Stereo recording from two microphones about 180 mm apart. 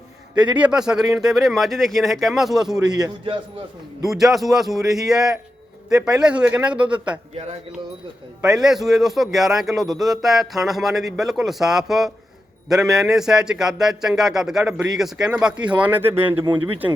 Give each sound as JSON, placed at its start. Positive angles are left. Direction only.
{"t": 0.4, "sound": "a man's voice", "side_deg": -10}
{"t": 2.8, "sound": "a man's voice", "side_deg": -20}
{"t": 4.0, "sound": "a man's voice", "side_deg": 0}
{"t": 8.4, "sound": "a man's voice", "side_deg": -5}